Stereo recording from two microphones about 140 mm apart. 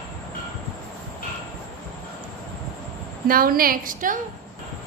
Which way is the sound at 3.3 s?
90° right.